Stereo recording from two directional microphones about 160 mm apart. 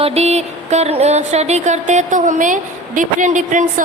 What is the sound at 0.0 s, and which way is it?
Music, 40° right (ahead or behind).